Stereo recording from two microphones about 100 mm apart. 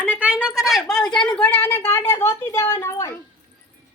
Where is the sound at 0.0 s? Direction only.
15° right (ahead or behind); by 3.2 s 25° left (ahead or behind).